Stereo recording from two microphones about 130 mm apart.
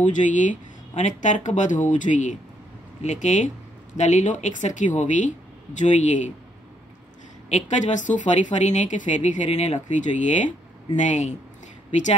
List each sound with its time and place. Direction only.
0.0 s speech: 75° left (ahead or behind)
7.4 s speech: 60° left (ahead or behind)